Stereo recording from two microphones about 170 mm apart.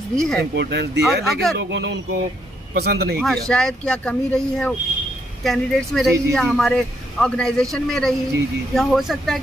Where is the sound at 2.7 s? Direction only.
70° right (ahead or behind).